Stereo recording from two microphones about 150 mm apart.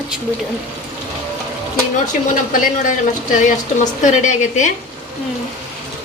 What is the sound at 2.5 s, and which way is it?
A woman's voice, 65° left (ahead or behind).